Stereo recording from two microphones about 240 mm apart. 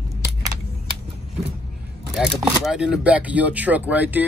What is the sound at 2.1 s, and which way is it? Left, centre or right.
Speech, centre.